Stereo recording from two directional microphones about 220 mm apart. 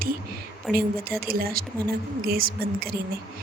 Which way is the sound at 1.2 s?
45° right (ahead or behind).